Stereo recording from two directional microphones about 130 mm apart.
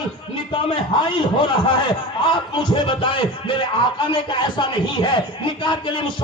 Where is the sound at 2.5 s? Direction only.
40° left (ahead or behind).